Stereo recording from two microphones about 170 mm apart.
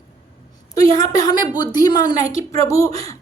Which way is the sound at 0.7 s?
20° left (ahead or behind).